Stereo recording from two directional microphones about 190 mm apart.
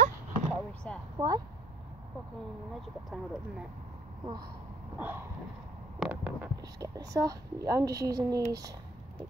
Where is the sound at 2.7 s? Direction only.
Centre (ahead or behind).